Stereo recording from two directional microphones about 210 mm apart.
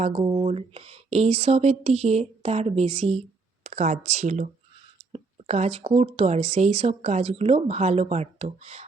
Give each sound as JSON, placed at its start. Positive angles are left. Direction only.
{"t": 0.0, "sound": "speech", "side_deg": -25}